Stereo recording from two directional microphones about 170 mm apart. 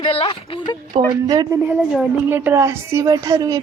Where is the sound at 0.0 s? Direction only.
35° left (ahead or behind).